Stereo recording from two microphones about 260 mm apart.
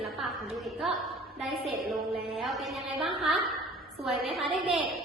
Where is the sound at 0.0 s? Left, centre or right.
Centre.